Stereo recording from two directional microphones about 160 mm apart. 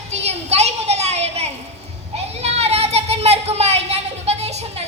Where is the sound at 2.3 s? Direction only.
40° right (ahead or behind).